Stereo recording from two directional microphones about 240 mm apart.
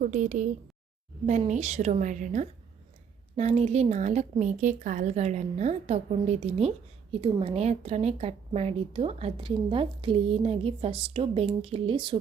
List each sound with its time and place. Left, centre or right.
0.0 s a woman's voice: right